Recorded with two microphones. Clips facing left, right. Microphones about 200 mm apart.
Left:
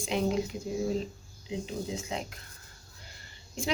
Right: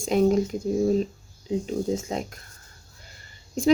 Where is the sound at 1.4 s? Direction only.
45° right (ahead or behind).